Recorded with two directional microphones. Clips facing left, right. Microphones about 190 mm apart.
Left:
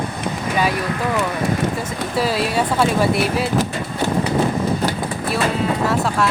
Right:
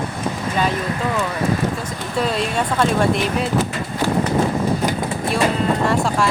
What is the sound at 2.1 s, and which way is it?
Speech, 5° left (ahead or behind).